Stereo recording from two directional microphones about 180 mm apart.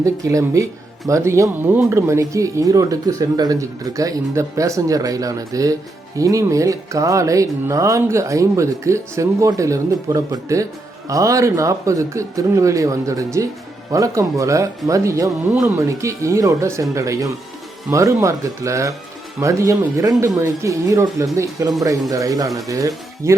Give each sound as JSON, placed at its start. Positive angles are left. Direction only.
{"t": 0.0, "sound": "speech", "side_deg": -20}